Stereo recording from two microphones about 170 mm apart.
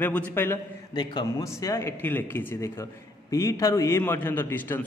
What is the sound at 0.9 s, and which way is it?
A man's voice, 25° left (ahead or behind).